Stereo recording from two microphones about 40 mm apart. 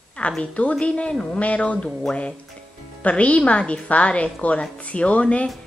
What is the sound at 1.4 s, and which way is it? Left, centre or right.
A woman's voice, left.